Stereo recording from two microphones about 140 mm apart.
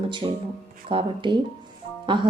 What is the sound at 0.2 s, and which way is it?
Speech, 30° right (ahead or behind).